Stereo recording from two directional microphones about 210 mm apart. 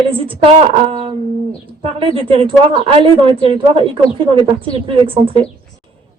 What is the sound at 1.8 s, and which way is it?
Speech, 25° right (ahead or behind).